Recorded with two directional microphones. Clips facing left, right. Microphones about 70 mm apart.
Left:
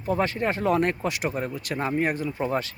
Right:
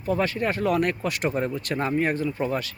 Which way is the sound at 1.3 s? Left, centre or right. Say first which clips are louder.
Right 3 dB; centre.